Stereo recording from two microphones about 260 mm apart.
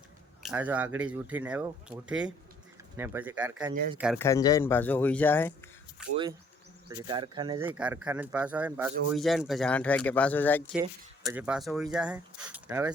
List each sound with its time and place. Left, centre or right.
0.4 s speech: centre
4.2 s speech: centre
6.0 s speech: centre
7.1 s speech: centre
7.7 s speech: centre
10.8 s speech: centre